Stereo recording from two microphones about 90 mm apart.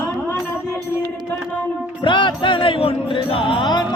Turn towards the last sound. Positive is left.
turn(degrees=55)  # may be behind; listen again after turning